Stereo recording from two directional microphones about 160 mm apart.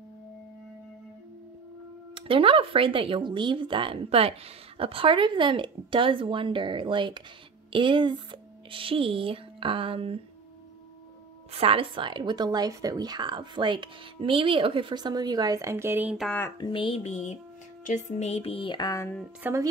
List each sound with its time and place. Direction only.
2.1 s speech: 35° right (ahead or behind)
11.5 s a woman's voice: 35° right (ahead or behind); by 16.3 s 10° right (ahead or behind)
16.3 s speech: 10° left (ahead or behind)
16.5 s a sound: 30° left (ahead or behind)
19.4 s a woman's voice: 20° right (ahead or behind)